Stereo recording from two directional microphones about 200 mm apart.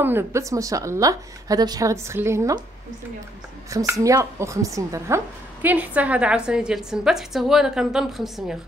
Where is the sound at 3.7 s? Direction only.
15° right (ahead or behind).